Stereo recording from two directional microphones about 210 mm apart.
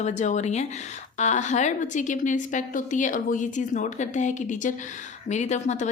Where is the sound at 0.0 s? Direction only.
35° left (ahead or behind).